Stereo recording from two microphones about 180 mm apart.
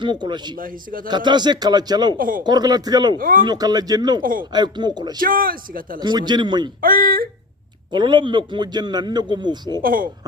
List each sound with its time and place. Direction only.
0.0 s a man's voice: 25° right (ahead or behind)
0.5 s speech: 50° right (ahead or behind)
1.0 s a man's voice: 25° right (ahead or behind)
2.1 s speech: 50° right (ahead or behind)
2.4 s a man's voice: 25° right (ahead or behind)
3.2 s speech: 50° right (ahead or behind)
3.4 s a man's voice: 20° right (ahead or behind)
4.2 s speech: 50° right (ahead or behind)
4.5 s a man's voice: 25° right (ahead or behind)
5.2 s speech: 50° right (ahead or behind)
6.0 s a man's voice: 25° right (ahead or behind)
6.8 s speech: 50° right (ahead or behind)
7.9 s a man's voice: 25° right (ahead or behind)
9.8 s speech: 50° right (ahead or behind)